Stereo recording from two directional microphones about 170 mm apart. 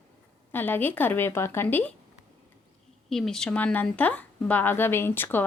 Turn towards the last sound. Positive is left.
turn(degrees=10)  # may be behind; listen again after turning